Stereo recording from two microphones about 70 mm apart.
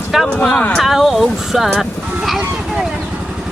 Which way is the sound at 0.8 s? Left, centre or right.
Centre.